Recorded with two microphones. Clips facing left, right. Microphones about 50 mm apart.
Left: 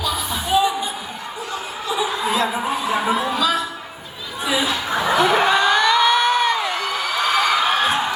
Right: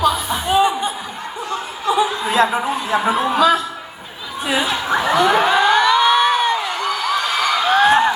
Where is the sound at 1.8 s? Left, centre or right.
Right.